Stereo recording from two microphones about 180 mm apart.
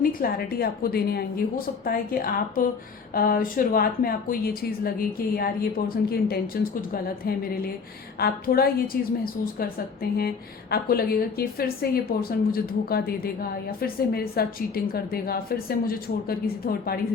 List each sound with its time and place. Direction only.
0.0 s a woman's voice: 55° left (ahead or behind)